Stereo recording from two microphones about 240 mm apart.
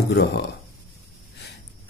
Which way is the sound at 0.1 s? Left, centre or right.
Left.